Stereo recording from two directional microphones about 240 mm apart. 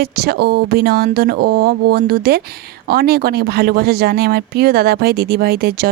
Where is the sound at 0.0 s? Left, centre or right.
Right.